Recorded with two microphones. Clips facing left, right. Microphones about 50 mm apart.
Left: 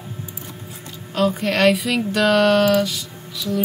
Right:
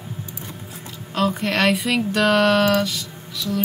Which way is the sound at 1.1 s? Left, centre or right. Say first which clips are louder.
Left 2 dB; centre.